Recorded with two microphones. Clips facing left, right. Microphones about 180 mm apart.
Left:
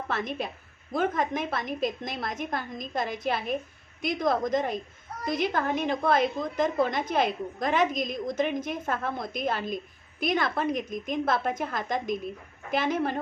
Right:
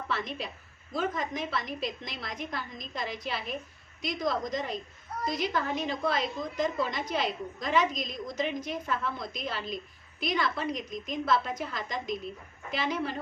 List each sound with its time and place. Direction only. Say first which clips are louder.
0.1 s a woman's voice: left 3 dB; 50° left (ahead or behind)